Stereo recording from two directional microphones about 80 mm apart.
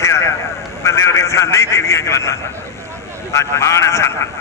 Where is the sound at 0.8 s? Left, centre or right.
Left.